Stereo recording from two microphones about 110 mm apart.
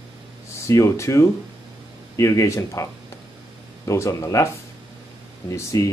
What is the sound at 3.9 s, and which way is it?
Speech, 30° left (ahead or behind).